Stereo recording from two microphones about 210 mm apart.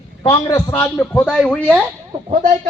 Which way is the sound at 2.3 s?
40° right (ahead or behind).